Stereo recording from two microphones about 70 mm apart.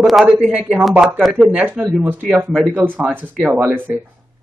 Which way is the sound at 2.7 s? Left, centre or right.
Right.